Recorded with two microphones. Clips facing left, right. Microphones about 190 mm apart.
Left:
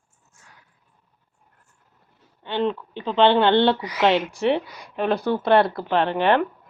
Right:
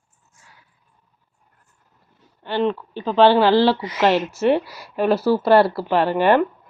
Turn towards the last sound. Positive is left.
turn(degrees=-5)  # may be behind; listen again after turning